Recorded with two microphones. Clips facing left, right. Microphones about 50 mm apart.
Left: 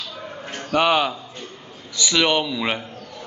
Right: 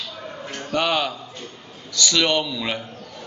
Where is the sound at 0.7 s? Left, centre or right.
Centre.